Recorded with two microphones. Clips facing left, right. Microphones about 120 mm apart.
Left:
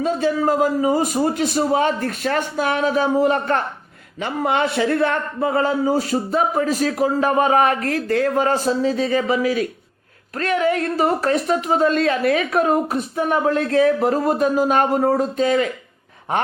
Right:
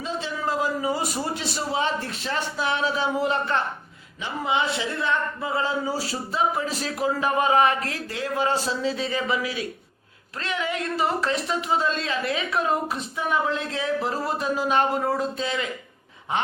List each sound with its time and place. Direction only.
0.0 s a man's voice: 50° left (ahead or behind)